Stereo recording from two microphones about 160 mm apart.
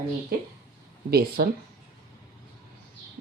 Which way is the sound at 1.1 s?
70° right (ahead or behind).